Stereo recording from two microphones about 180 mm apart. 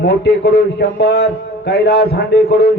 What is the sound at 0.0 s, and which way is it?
A man's voice, 70° left (ahead or behind).